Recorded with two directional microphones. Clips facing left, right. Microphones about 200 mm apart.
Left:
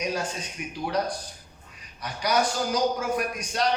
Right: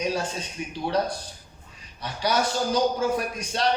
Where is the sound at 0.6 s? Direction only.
30° right (ahead or behind).